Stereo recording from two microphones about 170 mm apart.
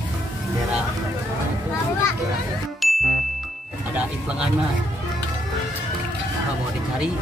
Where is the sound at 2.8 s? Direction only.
Centre (ahead or behind).